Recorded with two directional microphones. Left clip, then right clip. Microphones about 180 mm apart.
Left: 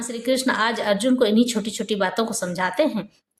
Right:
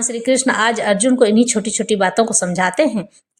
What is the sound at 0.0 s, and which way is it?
A woman's voice, 25° right (ahead or behind).